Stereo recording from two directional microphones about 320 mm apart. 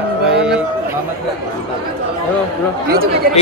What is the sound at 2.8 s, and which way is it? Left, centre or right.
Speech, right.